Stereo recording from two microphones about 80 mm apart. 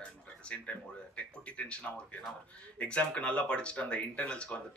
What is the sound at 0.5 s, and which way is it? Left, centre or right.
Speech, centre.